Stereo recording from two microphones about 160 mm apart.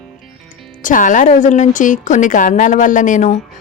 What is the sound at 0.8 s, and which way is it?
Speech, 55° left (ahead or behind).